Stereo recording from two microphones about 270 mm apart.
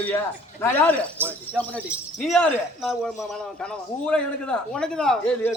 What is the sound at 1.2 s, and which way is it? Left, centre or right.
Speech, centre.